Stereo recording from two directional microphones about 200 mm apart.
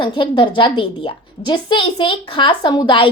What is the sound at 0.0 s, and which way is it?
A woman's voice, 25° left (ahead or behind).